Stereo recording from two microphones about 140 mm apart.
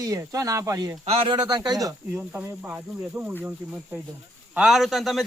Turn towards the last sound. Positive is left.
turn(degrees=0)  # may be behind; listen again after turning